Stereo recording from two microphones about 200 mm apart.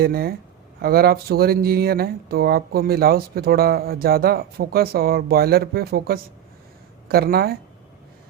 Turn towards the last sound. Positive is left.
turn(degrees=-50)  # may be behind; listen again after turning